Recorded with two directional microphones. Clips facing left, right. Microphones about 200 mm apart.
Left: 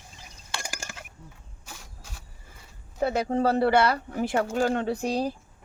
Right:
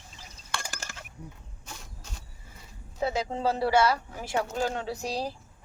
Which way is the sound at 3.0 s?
60° left (ahead or behind).